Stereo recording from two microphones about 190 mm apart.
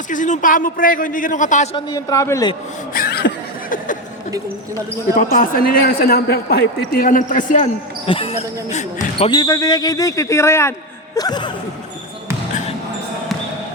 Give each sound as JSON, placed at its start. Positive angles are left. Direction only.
{"t": 0.1, "sound": "a man's voice", "side_deg": 40}
{"t": 1.7, "sound": "a man's voice", "side_deg": 20}
{"t": 2.9, "sound": "chuckle", "side_deg": 55}
{"t": 5.1, "sound": "a man's voice", "side_deg": 45}
{"t": 8.0, "sound": "speech", "side_deg": 30}